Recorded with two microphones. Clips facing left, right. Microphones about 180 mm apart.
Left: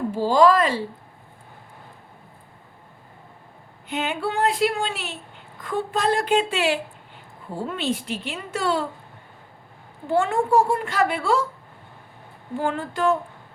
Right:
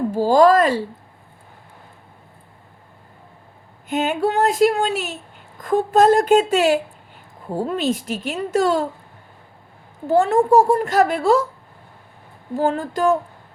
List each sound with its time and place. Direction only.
0.1 s speech: 45° right (ahead or behind)
3.8 s a child's voice: 45° right (ahead or behind)
10.1 s a woman's voice: 40° right (ahead or behind)
12.5 s a woman's voice: 40° right (ahead or behind)